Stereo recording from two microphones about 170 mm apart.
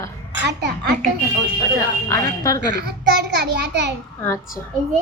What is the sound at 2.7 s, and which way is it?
A child's voice, 85° right.